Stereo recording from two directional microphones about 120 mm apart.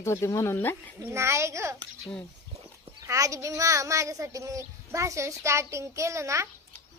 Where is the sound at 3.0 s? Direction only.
25° right (ahead or behind).